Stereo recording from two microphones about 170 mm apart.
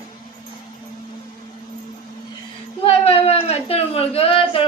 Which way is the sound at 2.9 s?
35° left (ahead or behind).